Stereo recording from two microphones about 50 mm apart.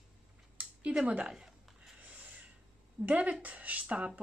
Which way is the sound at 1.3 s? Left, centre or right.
Centre.